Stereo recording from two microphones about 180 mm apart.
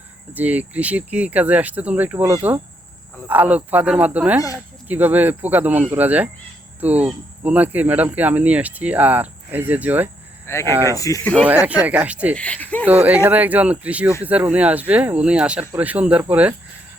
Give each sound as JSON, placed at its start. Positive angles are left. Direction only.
{"t": 0.3, "sound": "speech", "side_deg": -10}
{"t": 10.4, "sound": "speech", "side_deg": 15}
{"t": 11.4, "sound": "speech", "side_deg": -10}
{"t": 12.4, "sound": "speech", "side_deg": 10}
{"t": 12.8, "sound": "speech", "side_deg": -10}